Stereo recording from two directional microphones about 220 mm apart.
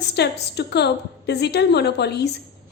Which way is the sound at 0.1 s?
50° left (ahead or behind).